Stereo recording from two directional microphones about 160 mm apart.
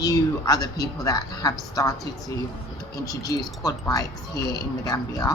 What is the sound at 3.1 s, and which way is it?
Speech, 25° left (ahead or behind).